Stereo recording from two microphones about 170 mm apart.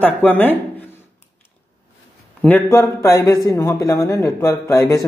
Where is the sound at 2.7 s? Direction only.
20° left (ahead or behind).